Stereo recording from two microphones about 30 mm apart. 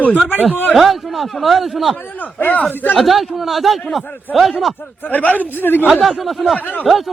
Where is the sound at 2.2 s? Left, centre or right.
Left.